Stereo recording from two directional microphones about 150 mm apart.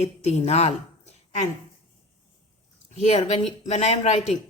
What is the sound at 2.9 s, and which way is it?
A woman's voice, 45° left (ahead or behind).